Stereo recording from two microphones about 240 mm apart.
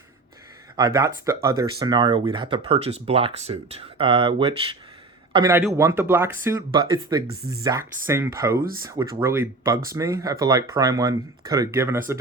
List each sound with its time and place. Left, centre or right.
0.8 s speech: centre
7.3 s speech: right
7.6 s speech: centre